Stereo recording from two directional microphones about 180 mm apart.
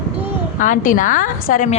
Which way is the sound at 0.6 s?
45° left (ahead or behind).